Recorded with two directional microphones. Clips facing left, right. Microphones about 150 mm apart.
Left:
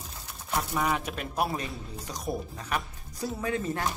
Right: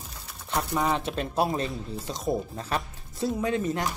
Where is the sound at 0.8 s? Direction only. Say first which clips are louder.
Right 4 dB; 25° right (ahead or behind).